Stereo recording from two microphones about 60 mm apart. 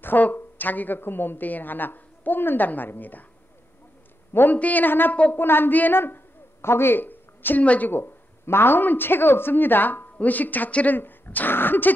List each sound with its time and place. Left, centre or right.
0.0 s a woman's voice: left
4.3 s a man's voice: left
5.1 s a woman's voice: left
5.4 s a woman's voice: left
7.9 s a woman's voice: left